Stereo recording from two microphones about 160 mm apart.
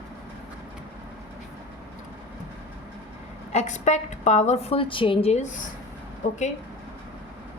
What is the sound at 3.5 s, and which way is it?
A woman's voice, 45° left (ahead or behind).